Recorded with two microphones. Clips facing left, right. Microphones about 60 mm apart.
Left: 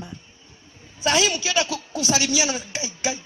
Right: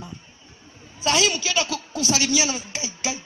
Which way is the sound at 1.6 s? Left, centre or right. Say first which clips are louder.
Even; right.